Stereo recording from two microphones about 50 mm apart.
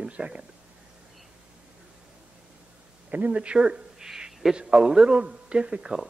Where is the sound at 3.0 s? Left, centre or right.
Right; by 4.5 s centre.